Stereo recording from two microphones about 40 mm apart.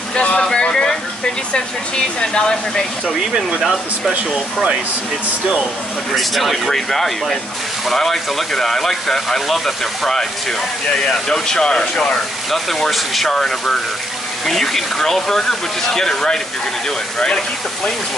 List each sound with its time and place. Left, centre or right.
0.1 s speech: left
0.6 s a sound: left
1.5 s speech: left
6.1 s speech: centre
11.2 s speech: centre
12.4 s speech: centre
13.3 s speech: centre